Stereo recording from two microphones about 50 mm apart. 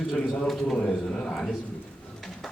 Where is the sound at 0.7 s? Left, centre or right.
Centre.